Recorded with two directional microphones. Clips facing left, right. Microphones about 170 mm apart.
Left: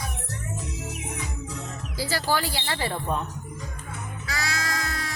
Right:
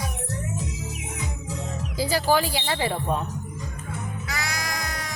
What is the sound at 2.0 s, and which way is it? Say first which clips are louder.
Speech: right 4 dB; 15° right (ahead or behind).